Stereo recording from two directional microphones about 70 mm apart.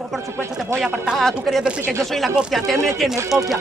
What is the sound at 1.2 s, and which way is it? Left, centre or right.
Speech, centre.